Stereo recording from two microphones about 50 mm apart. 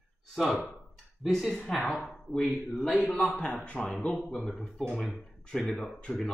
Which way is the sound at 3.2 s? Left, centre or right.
Left.